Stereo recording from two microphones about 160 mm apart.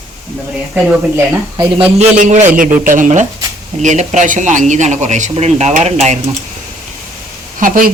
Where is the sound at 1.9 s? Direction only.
45° right (ahead or behind).